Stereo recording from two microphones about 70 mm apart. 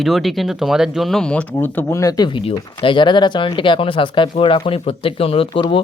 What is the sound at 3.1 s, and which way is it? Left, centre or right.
Speech, left.